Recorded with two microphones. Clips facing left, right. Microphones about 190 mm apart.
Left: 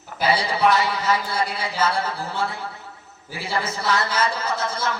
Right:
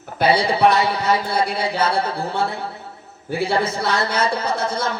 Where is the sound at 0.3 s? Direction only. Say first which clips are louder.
Right 2 dB; 60° right (ahead or behind).